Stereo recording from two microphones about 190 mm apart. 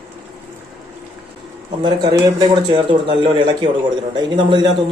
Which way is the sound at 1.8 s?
20° right (ahead or behind).